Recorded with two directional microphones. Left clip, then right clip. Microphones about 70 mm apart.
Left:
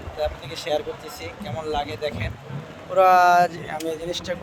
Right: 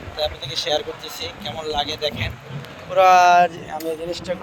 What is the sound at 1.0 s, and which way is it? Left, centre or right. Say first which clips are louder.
Speech: right 4 dB; left.